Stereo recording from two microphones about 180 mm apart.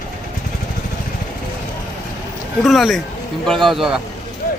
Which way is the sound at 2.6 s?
Centre (ahead or behind).